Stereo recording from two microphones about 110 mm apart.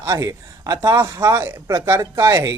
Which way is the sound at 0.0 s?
30° right (ahead or behind).